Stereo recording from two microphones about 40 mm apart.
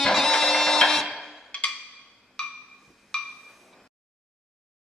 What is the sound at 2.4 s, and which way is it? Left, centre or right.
Music, left.